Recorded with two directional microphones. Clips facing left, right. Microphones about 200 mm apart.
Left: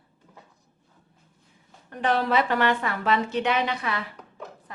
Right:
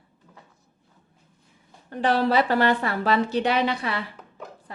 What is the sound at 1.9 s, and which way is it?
A woman's voice, 30° right (ahead or behind).